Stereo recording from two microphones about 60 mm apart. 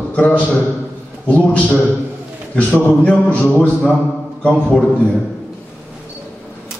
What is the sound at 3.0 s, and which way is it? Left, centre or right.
Speech, left.